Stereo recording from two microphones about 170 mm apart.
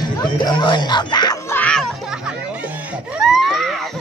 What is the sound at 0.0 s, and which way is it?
Speech, 25° left (ahead or behind).